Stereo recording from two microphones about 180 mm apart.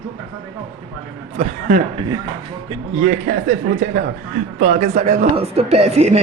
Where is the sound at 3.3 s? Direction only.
50° right (ahead or behind).